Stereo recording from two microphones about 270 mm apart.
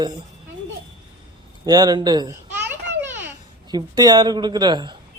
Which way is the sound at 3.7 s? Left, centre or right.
Centre.